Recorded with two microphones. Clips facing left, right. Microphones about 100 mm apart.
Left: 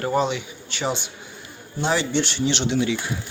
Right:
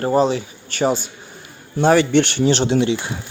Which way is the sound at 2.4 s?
40° right (ahead or behind).